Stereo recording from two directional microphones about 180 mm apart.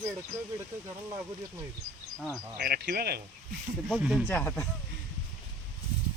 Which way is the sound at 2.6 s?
60° right (ahead or behind).